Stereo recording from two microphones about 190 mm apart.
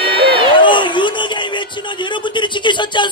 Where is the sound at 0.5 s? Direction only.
25° left (ahead or behind).